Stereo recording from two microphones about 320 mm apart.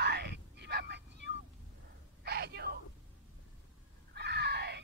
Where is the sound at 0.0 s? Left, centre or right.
Right.